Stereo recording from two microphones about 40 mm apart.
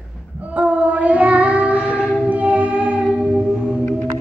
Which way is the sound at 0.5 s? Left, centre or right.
Right.